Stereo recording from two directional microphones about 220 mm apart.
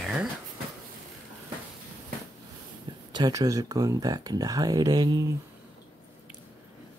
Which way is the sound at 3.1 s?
15° right (ahead or behind).